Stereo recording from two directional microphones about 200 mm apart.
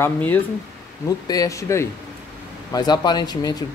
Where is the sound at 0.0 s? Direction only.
10° left (ahead or behind).